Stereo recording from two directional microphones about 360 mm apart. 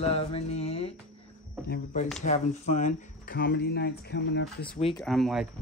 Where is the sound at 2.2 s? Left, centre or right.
Centre.